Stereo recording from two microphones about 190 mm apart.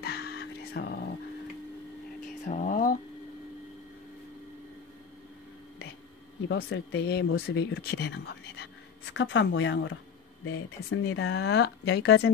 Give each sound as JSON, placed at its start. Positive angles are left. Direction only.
{"t": 0.0, "sound": "music", "side_deg": 55}
{"t": 2.4, "sound": "a sound", "side_deg": 40}
{"t": 6.5, "sound": "speech", "side_deg": 65}
{"t": 10.5, "sound": "speech", "side_deg": 90}